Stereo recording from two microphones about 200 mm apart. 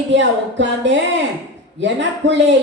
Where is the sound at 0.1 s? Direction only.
65° right (ahead or behind).